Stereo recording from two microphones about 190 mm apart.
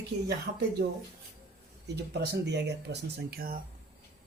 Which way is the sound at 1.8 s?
60° right (ahead or behind).